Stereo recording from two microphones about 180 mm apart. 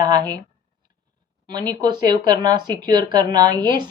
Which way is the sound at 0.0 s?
20° right (ahead or behind).